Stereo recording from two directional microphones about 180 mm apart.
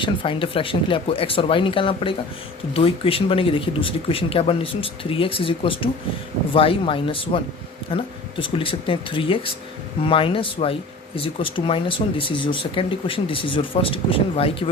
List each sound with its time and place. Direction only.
0.0 s speech: 30° left (ahead or behind)